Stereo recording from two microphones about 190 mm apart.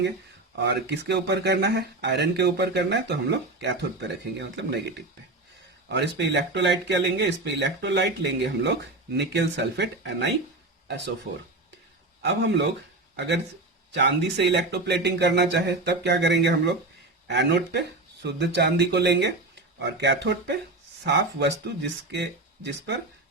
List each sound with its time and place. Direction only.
0.6 s speech: 65° right (ahead or behind)
5.9 s speech: 65° right (ahead or behind)
12.2 s speech: 65° right (ahead or behind)